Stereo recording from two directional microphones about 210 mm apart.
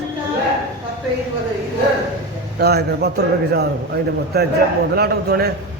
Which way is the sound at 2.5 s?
50° right (ahead or behind).